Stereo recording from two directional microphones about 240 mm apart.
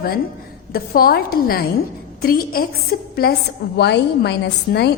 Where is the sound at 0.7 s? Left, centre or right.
Left.